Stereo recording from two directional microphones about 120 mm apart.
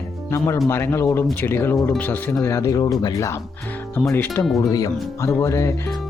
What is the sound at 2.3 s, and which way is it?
Speech, 25° left (ahead or behind).